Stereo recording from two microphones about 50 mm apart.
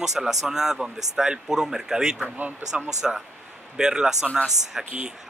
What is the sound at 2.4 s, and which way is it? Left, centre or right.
Speech, right.